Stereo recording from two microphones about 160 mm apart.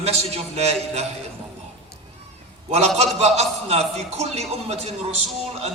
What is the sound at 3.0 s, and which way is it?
A man's voice, 40° right (ahead or behind).